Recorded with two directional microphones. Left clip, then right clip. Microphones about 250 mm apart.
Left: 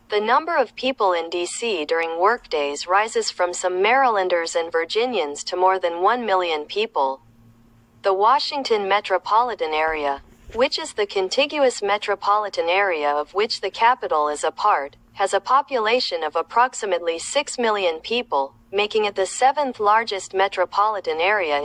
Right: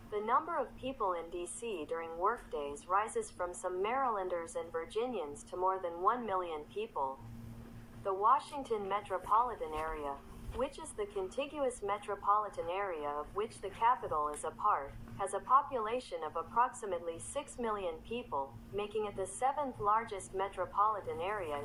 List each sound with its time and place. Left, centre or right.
0.1 s speech: left